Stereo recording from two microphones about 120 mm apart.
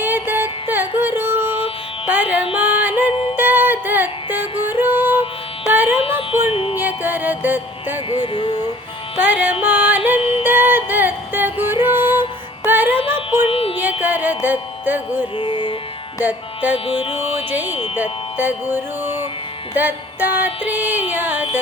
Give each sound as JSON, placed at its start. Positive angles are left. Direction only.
{"t": 0.0, "sound": "music", "side_deg": -15}
{"t": 5.7, "sound": "carnatic music", "side_deg": -15}
{"t": 6.5, "sound": "music", "side_deg": 50}
{"t": 6.7, "sound": "music", "side_deg": -15}
{"t": 8.2, "sound": "a sound", "side_deg": 40}
{"t": 9.1, "sound": "music", "side_deg": -15}
{"t": 10.2, "sound": "music", "side_deg": 50}
{"t": 10.4, "sound": "music", "side_deg": -15}
{"t": 13.5, "sound": "music", "side_deg": 50}
{"t": 14.0, "sound": "music", "side_deg": -15}
{"t": 15.4, "sound": "music", "side_deg": 45}
{"t": 16.2, "sound": "music", "side_deg": -15}
{"t": 16.7, "sound": "music", "side_deg": 55}
{"t": 17.3, "sound": "music", "side_deg": -15}